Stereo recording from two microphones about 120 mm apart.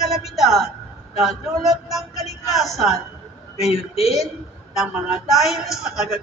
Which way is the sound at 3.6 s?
60° left (ahead or behind).